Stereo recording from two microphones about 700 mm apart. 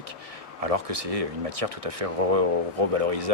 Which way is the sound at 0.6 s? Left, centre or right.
Right.